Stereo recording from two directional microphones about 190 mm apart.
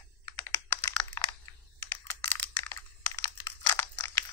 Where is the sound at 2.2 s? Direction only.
15° left (ahead or behind).